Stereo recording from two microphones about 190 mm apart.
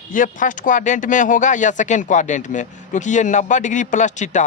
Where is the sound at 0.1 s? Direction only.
45° left (ahead or behind).